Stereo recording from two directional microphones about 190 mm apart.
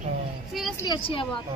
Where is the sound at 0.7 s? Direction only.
20° left (ahead or behind).